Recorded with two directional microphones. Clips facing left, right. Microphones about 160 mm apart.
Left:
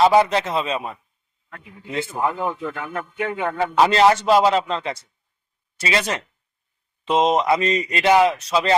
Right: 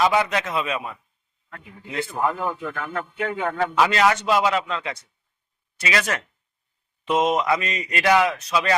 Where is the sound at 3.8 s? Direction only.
30° left (ahead or behind).